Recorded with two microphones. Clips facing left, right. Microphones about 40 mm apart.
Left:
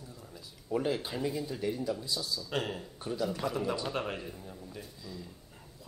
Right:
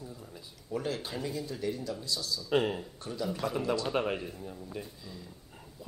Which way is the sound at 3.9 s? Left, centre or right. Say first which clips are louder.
Right 4 dB; centre.